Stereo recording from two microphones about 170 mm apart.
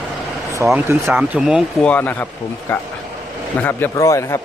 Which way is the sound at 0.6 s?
5° right (ahead or behind).